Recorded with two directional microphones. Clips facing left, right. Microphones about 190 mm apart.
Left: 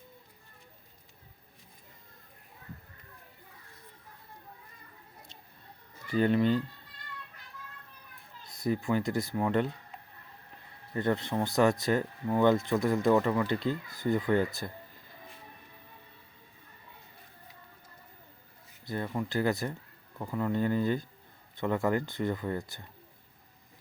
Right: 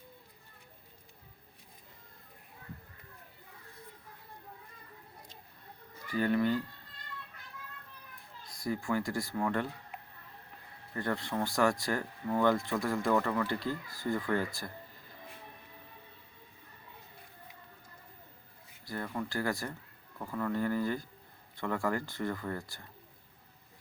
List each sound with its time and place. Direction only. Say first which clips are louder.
6.1 s speech: left 4 dB; 25° left (ahead or behind)
8.4 s speech: left 4 dB; 20° left (ahead or behind)
10.9 s speech: left 5 dB; 20° left (ahead or behind)
18.9 s speech: left 4 dB; 20° left (ahead or behind)